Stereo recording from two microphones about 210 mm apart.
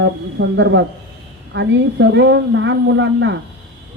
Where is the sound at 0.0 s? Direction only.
60° right (ahead or behind).